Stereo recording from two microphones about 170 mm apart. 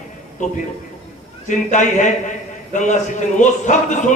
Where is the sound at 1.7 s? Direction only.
45° left (ahead or behind).